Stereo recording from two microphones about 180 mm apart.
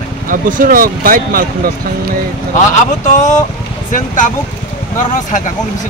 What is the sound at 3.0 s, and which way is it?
Speech, 45° left (ahead or behind).